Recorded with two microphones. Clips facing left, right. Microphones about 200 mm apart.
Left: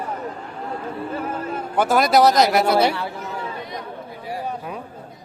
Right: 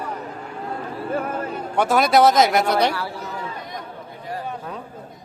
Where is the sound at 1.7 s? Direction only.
Centre (ahead or behind).